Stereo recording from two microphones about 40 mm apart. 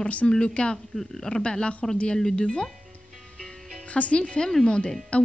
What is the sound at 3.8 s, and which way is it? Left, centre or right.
A woman's voice, left.